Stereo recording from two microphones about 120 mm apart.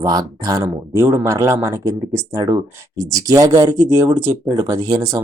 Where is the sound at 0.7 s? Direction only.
20° right (ahead or behind).